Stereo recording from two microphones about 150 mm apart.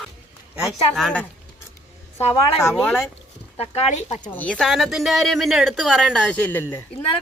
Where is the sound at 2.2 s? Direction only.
40° left (ahead or behind).